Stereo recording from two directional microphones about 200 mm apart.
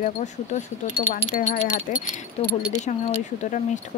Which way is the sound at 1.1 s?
40° left (ahead or behind).